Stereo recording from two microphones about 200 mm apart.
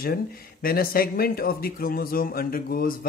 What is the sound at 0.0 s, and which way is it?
Speech, 45° left (ahead or behind).